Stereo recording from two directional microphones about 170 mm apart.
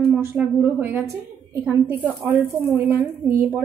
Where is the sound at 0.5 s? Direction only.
10° right (ahead or behind).